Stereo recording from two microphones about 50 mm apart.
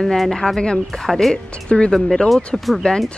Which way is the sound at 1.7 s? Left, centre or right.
Centre.